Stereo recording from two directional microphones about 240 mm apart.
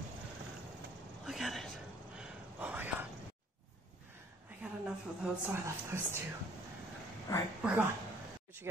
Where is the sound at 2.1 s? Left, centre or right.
Centre.